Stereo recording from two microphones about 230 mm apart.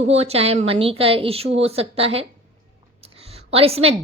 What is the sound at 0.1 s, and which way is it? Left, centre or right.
A woman's voice, right.